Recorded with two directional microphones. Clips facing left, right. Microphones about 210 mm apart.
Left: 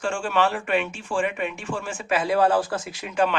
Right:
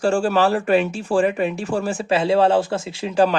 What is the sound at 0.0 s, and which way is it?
Speech, 35° right (ahead or behind).